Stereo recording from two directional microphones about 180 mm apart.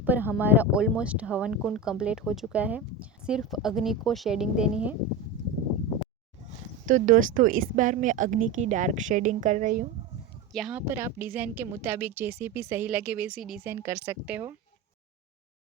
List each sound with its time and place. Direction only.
0.0 s speech: 10° right (ahead or behind)
6.8 s speech: 45° right (ahead or behind)
10.5 s a woman's voice: centre (ahead or behind)
13.7 s a woman's voice: 15° right (ahead or behind)